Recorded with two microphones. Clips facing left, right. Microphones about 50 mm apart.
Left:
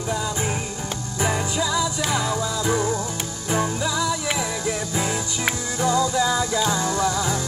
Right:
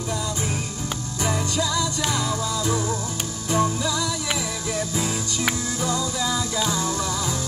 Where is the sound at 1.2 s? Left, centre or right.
Centre.